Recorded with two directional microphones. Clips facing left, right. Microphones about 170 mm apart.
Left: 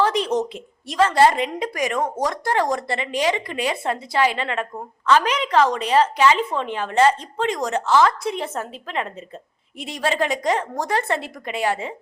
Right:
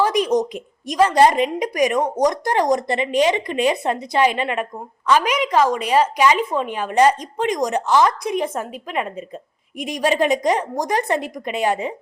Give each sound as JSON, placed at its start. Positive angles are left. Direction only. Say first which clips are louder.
{"t": 0.0, "sound": "a woman's voice", "louder": "right 2 dB", "side_deg": -10}